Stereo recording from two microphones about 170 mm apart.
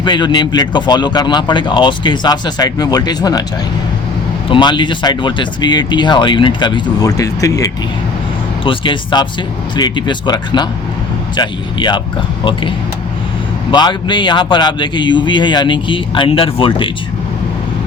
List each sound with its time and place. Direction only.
0.0 s speech: 25° left (ahead or behind)
4.4 s speech: 30° left (ahead or behind)
8.6 s speech: 30° left (ahead or behind)
13.7 s speech: 25° left (ahead or behind)